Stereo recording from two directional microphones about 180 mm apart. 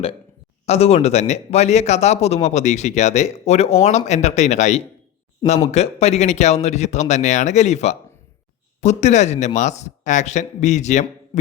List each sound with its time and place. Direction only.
0.6 s speech: 35° left (ahead or behind)